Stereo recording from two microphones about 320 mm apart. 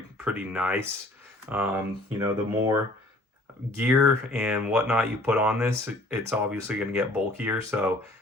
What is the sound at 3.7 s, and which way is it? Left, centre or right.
Speech, centre.